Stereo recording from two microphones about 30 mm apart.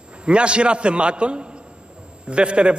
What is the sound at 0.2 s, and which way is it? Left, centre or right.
A man's voice, right.